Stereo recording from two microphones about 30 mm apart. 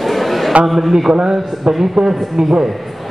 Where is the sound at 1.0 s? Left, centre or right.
Centre.